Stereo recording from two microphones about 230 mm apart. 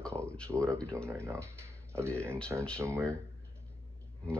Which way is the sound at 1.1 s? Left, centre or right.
Centre.